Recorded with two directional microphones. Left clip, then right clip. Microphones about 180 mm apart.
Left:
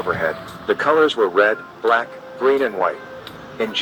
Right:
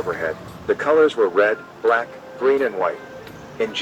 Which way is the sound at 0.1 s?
45° left (ahead or behind).